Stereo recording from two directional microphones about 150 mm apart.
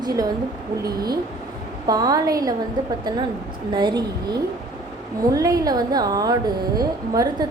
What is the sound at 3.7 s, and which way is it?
A woman's voice, 30° right (ahead or behind).